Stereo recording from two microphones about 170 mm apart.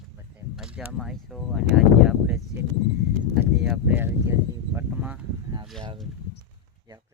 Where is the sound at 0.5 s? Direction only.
5° right (ahead or behind).